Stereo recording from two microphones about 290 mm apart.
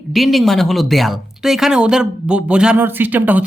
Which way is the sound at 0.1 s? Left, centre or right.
Centre.